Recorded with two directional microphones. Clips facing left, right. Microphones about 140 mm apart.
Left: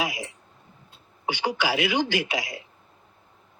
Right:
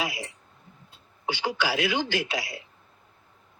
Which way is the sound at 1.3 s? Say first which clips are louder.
Left 2 dB; 15° left (ahead or behind).